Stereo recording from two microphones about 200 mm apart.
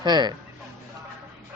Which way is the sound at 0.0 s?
20° right (ahead or behind).